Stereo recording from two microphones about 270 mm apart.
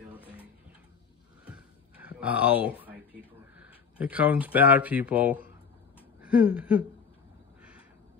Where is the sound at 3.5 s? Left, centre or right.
Centre.